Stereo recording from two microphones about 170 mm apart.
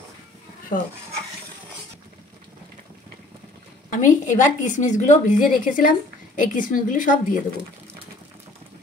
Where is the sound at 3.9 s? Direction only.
45° left (ahead or behind).